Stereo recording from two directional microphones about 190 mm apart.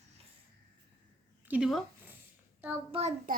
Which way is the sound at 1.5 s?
Centre (ahead or behind).